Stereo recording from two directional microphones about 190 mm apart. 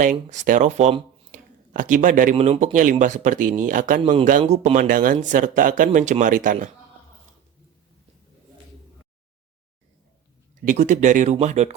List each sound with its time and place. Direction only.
0.0 s speech: 40° right (ahead or behind)
10.7 s speech: 40° right (ahead or behind)